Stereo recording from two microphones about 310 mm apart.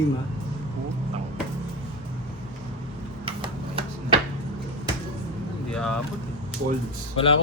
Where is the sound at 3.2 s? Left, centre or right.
Centre.